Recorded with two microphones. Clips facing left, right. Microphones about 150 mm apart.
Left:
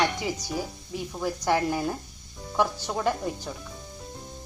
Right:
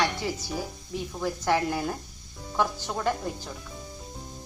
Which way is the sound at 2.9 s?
10° left (ahead or behind).